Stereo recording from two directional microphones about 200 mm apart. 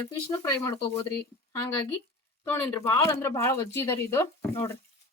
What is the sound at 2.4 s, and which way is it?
Speech, 10° left (ahead or behind).